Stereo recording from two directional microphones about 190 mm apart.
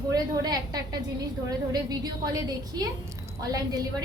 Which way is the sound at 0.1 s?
20° right (ahead or behind).